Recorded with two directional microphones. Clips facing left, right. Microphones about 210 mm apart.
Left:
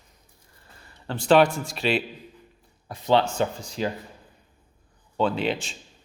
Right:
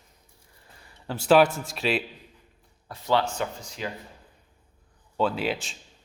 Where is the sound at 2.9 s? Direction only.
20° left (ahead or behind).